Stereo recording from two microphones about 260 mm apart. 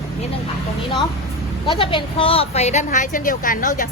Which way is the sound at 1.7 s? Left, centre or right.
Centre.